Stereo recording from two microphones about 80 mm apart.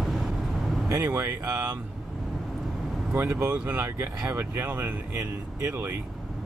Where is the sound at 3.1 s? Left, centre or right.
Right.